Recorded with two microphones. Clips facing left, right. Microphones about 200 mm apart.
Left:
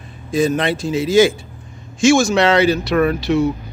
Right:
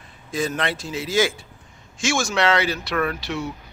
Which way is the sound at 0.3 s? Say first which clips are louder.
Left 8 dB; 15° left (ahead or behind).